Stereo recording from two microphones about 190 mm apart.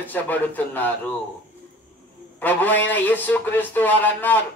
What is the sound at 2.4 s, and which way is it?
Speech, 10° left (ahead or behind).